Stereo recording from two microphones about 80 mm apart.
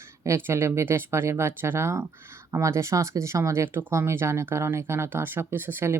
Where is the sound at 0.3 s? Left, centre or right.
Right.